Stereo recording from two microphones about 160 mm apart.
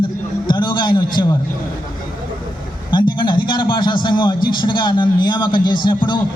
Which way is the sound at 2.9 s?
30° left (ahead or behind).